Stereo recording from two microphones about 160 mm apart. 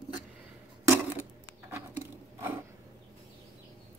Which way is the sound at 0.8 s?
15° right (ahead or behind).